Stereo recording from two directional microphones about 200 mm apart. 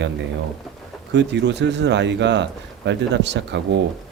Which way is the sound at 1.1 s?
60° right (ahead or behind).